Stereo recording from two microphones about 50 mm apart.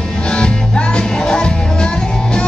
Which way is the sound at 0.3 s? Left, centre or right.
Centre.